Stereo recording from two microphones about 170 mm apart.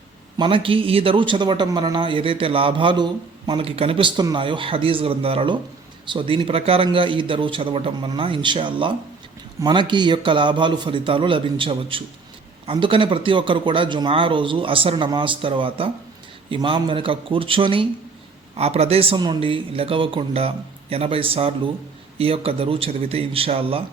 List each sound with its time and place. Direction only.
0.3 s a man's voice: 30° right (ahead or behind)